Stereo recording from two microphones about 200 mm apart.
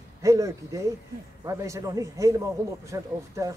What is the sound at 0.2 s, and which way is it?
Speech, 15° right (ahead or behind).